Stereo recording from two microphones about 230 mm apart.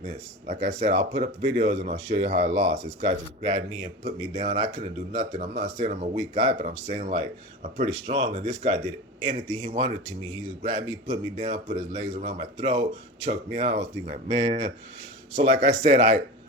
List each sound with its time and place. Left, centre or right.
0.6 s speech: right
15.7 s speech: right